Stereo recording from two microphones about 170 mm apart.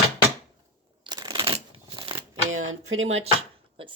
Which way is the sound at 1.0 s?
25° right (ahead or behind).